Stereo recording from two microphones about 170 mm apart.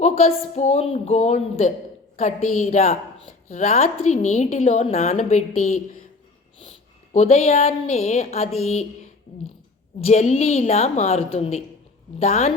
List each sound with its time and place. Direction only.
0.0 s a woman's voice: 35° left (ahead or behind)
7.1 s speech: 40° left (ahead or behind)
10.0 s speech: 40° left (ahead or behind)